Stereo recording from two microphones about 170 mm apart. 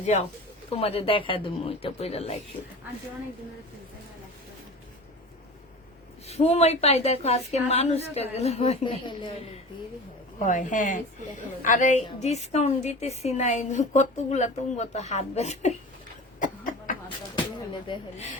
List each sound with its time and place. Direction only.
0.0 s a woman's voice: 40° left (ahead or behind)
6.2 s a woman's voice: 40° left (ahead or behind)
10.3 s a woman's voice: 45° left (ahead or behind)
16.4 s cough: 50° left (ahead or behind)
17.9 s a woman's voice: 30° left (ahead or behind)